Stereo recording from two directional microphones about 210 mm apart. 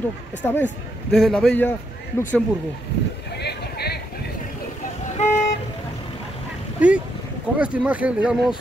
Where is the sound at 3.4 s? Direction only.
50° left (ahead or behind).